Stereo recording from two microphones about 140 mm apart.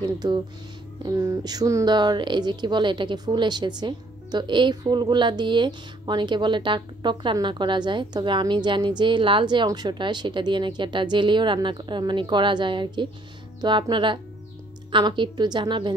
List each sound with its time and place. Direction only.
0.0 s speech: 30° right (ahead or behind)
1.0 s speech: 20° right (ahead or behind)